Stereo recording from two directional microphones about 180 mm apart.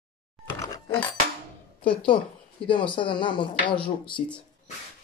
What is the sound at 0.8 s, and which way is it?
A woman's voice, 25° left (ahead or behind).